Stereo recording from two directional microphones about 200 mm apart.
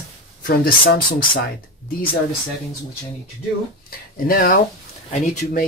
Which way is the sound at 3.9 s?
45° left (ahead or behind).